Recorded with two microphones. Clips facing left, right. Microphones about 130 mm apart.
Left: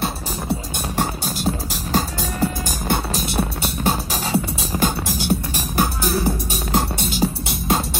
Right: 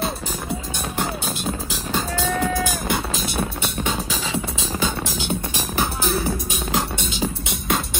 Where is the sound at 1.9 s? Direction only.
35° left (ahead or behind).